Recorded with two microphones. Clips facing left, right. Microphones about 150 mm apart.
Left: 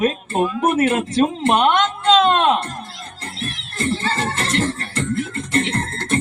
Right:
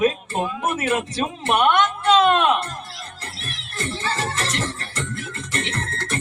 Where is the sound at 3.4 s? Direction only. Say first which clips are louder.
Left 7 dB; 25° left (ahead or behind).